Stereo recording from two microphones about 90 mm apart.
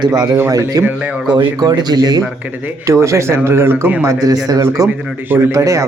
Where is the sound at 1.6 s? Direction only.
50° right (ahead or behind).